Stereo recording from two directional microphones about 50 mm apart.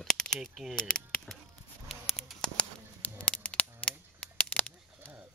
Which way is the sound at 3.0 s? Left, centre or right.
Left.